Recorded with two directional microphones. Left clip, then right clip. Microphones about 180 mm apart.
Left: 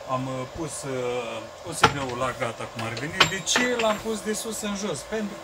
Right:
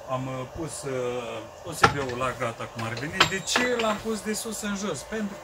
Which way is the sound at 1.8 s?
15° left (ahead or behind).